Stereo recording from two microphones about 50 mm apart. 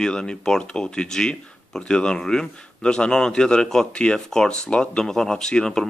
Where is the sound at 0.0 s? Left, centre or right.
Centre.